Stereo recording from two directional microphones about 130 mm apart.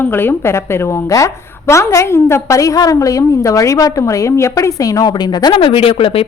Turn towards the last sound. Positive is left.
turn(degrees=45)  # may be behind; listen again after turning